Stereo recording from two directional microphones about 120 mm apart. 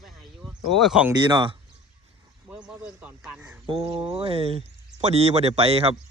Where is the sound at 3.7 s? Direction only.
50° right (ahead or behind).